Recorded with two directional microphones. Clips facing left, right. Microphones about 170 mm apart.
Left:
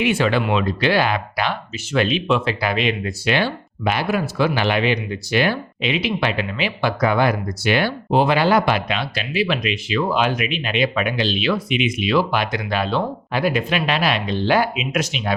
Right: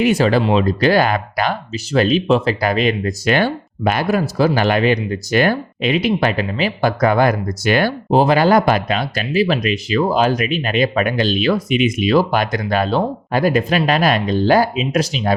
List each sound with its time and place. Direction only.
0.0 s speech: 40° right (ahead or behind)